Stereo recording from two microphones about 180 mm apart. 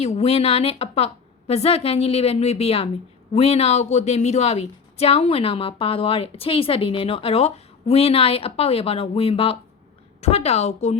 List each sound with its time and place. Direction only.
0.0 s a woman's voice: 35° left (ahead or behind)